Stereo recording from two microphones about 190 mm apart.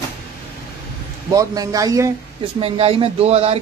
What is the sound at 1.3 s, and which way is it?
Speech, 20° right (ahead or behind).